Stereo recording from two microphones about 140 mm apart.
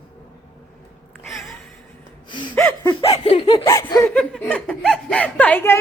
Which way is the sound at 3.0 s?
45° left (ahead or behind).